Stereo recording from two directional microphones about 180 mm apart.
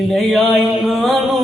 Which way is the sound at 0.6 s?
Centre (ahead or behind).